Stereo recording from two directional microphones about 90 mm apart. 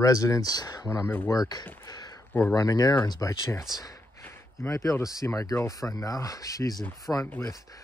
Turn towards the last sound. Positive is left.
turn(degrees=10)  # may be behind; listen again after turning